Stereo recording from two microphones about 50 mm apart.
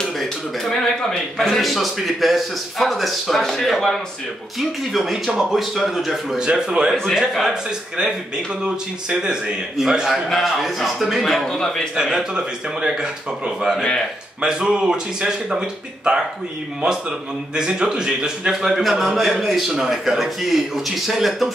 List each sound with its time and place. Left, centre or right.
0.0 s a man's voice: centre
6.3 s speech: centre
8.6 s a man's voice: centre
11.9 s speech: centre
17.6 s a man's voice: centre